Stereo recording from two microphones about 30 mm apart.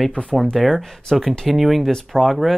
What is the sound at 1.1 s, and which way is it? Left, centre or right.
Speech, centre.